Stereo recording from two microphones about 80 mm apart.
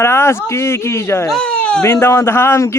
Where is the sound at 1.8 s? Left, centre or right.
Left.